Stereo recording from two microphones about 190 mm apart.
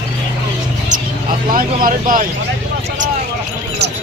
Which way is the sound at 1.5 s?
45° right (ahead or behind).